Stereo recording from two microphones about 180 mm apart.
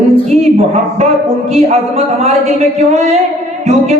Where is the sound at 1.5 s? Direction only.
35° right (ahead or behind).